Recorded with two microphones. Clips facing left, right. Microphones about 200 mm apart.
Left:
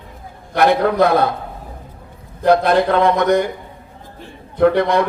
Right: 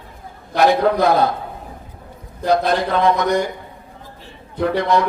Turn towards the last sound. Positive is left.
turn(degrees=60)  # may be behind; listen again after turning